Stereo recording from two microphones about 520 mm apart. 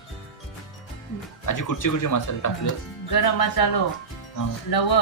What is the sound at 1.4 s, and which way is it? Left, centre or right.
Speech, left.